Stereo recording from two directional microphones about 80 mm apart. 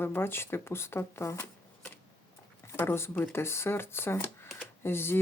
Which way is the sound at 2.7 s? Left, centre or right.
Left.